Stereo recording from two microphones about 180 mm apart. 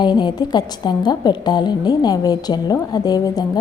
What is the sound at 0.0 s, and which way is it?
A woman's voice, 25° left (ahead or behind).